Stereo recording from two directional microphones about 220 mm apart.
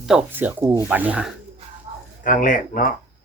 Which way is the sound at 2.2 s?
35° left (ahead or behind).